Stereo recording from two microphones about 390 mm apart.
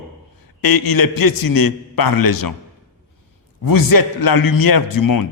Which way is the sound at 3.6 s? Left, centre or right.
Left.